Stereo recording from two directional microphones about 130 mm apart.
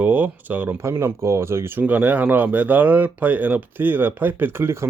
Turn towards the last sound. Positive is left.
turn(degrees=-20)  # may be behind; listen again after turning